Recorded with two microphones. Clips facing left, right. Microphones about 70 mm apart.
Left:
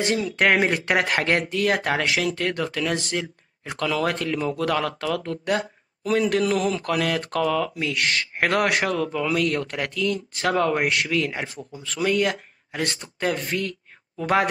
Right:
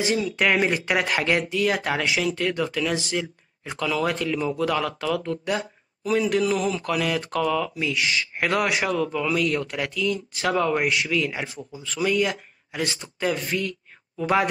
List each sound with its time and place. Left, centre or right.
0.0 s speech: left